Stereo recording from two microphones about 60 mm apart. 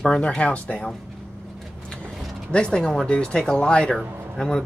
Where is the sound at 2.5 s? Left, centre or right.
Centre.